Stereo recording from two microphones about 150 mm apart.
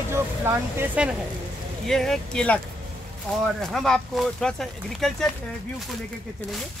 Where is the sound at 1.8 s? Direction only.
5° left (ahead or behind).